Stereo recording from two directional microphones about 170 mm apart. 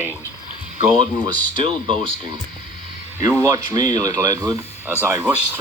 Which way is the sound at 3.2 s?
20° right (ahead or behind).